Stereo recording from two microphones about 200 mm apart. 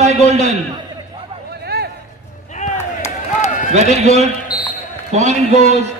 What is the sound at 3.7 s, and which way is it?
A man's voice, 35° right (ahead or behind).